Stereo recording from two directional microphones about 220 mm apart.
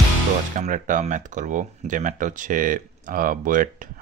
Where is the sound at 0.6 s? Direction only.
35° right (ahead or behind).